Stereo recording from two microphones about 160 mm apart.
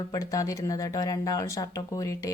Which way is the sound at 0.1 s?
20° left (ahead or behind).